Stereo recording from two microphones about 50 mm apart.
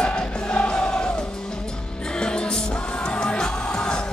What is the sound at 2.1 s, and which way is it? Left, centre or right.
Music, centre.